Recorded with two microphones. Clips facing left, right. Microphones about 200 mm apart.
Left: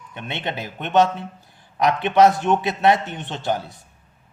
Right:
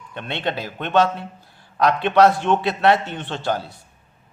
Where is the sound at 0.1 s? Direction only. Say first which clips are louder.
Right 3 dB; 15° left (ahead or behind).